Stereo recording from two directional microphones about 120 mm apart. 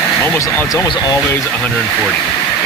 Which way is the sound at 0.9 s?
35° left (ahead or behind).